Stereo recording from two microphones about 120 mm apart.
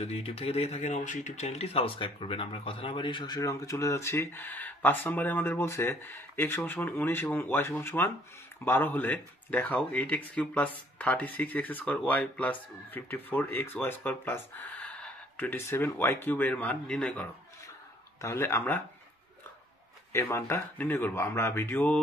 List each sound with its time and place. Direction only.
0.0 s speech: 55° left (ahead or behind); by 17.3 s 10° left (ahead or behind)
18.2 s speech: 20° left (ahead or behind)
20.1 s speech: 25° left (ahead or behind)